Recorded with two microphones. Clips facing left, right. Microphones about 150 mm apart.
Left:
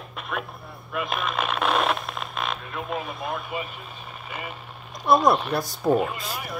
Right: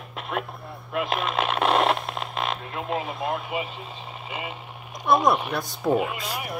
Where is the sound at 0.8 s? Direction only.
25° right (ahead or behind).